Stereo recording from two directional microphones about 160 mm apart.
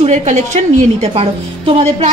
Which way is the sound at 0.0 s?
45° right (ahead or behind).